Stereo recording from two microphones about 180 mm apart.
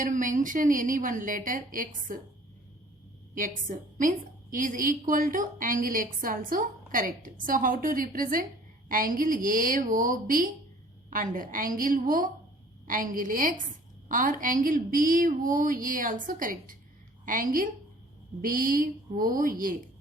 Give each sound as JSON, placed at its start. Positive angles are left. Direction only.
{"t": 0.0, "sound": "a woman's voice", "side_deg": -45}
{"t": 3.3, "sound": "a woman's voice", "side_deg": -45}